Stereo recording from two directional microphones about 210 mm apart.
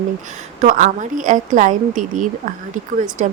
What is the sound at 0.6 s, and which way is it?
A woman's voice, 40° right (ahead or behind).